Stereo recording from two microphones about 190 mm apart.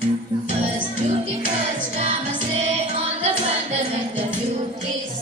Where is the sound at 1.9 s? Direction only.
35° right (ahead or behind).